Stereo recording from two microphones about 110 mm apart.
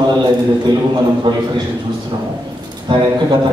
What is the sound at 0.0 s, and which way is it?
A man's voice, 40° right (ahead or behind).